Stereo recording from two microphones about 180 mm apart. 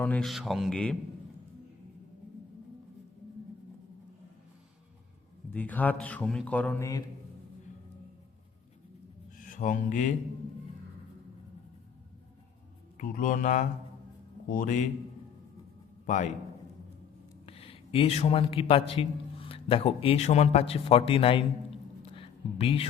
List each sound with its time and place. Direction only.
0.0 s speech: 5° left (ahead or behind)
5.5 s speech: 10° left (ahead or behind)
9.4 s speech: 45° left (ahead or behind)
13.0 s speech: 50° left (ahead or behind)
16.0 s a man's voice: 40° left (ahead or behind)
17.4 s a man's voice: 30° left (ahead or behind)
22.1 s a sound: 30° left (ahead or behind)